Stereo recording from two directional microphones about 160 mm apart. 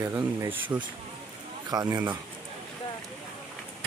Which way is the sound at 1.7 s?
25° right (ahead or behind).